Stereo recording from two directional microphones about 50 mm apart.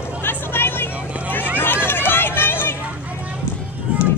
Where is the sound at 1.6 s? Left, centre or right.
Left.